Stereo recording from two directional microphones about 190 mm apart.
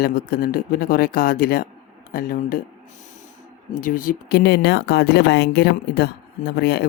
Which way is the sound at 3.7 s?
45° left (ahead or behind).